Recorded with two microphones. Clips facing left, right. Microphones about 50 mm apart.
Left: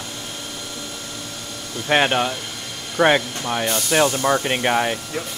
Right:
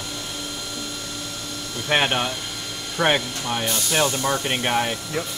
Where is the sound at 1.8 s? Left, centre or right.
Centre.